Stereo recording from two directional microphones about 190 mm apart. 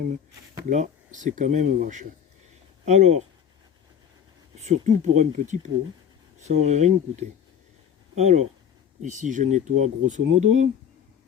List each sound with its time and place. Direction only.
0.7 s speech: 40° right (ahead or behind)
4.6 s speech: 35° right (ahead or behind)